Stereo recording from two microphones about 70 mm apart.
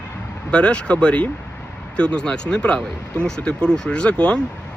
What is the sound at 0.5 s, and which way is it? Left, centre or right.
Speech, centre.